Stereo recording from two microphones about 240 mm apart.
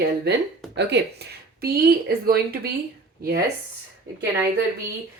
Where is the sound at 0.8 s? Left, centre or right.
Right.